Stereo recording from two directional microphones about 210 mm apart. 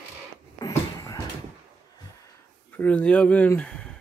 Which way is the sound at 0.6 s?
15° left (ahead or behind).